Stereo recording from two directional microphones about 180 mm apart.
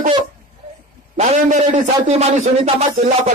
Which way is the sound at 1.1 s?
40° right (ahead or behind).